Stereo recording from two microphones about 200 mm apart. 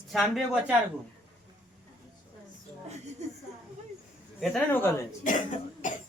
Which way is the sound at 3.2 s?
35° right (ahead or behind).